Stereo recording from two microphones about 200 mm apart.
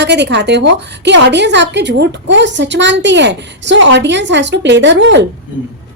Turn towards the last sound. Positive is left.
turn(degrees=-65)  # may be behind; listen again after turning